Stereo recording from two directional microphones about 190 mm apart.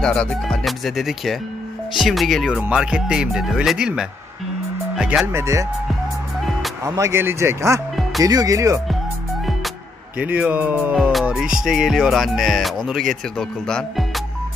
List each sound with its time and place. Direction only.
0.0 s music: 5° left (ahead or behind)
4.9 s speech: 5° right (ahead or behind)
6.8 s speech: 15° right (ahead or behind)
10.1 s music: 10° right (ahead or behind)
13.4 s speech: 5° left (ahead or behind)